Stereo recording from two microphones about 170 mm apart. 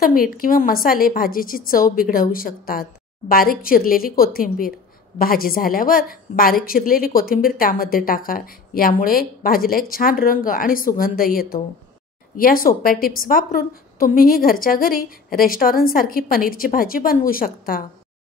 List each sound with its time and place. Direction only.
0.0 s a woman's voice: 55° left (ahead or behind)